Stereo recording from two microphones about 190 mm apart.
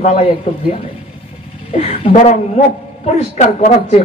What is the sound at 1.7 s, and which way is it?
A woman's voice, 30° left (ahead or behind).